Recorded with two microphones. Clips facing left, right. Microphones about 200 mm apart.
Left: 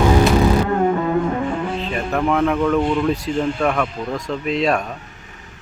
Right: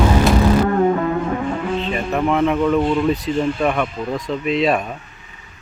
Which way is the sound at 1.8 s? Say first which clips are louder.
Even; centre (ahead or behind).